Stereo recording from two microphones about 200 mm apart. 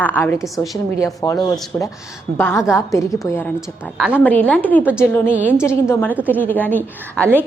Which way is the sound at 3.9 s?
5° right (ahead or behind).